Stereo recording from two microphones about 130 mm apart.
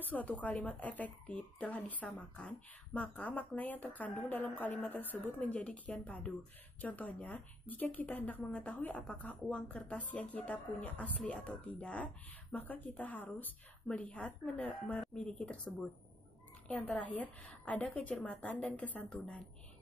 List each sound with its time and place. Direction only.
0.0 s speech: 15° left (ahead or behind)